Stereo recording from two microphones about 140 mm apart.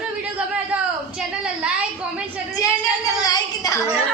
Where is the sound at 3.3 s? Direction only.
25° left (ahead or behind).